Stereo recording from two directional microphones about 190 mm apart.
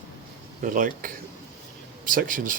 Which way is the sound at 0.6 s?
45° right (ahead or behind).